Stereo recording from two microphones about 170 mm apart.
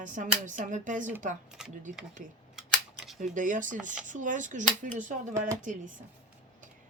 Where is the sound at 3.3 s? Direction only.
50° right (ahead or behind).